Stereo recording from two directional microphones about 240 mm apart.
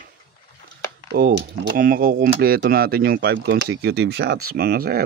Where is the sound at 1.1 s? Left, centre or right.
Right.